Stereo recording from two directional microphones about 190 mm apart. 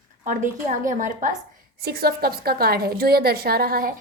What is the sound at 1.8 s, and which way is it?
A woman's voice, 55° right (ahead or behind).